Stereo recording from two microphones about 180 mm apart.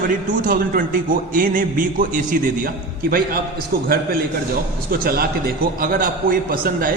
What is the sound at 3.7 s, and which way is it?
Speech, 55° right (ahead or behind).